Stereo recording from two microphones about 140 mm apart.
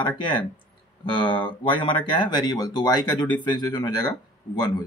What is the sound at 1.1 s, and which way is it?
Speech, 35° left (ahead or behind).